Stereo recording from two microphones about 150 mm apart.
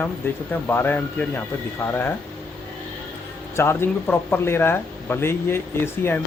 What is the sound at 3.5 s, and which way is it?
Speech, 15° left (ahead or behind).